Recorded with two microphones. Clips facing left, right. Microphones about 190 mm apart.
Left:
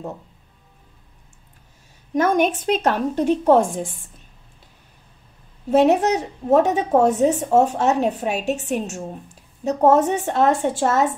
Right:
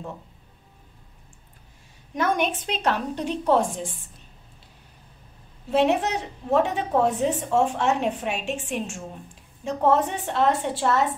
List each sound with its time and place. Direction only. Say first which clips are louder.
2.1 s a woman's voice: left 6 dB; 45° left (ahead or behind)
5.7 s a woman's voice: left 6 dB; 45° left (ahead or behind)